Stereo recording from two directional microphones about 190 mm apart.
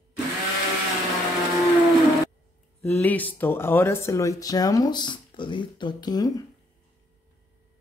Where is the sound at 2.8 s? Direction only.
10° left (ahead or behind).